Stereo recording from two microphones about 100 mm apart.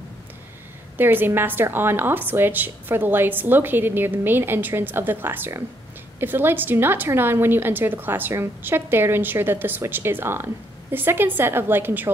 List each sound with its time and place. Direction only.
0.9 s a woman's voice: 20° right (ahead or behind)